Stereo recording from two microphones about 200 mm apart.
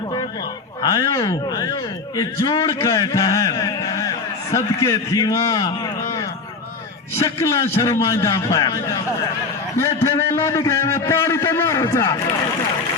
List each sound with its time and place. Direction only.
0.8 s a man's voice: 20° left (ahead or behind)
7.2 s a man's voice: 15° left (ahead or behind)